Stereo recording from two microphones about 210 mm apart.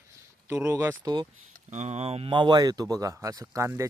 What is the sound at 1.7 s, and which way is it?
Speech, 30° right (ahead or behind).